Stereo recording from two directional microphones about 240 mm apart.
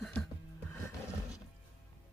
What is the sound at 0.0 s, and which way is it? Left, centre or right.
Music, centre.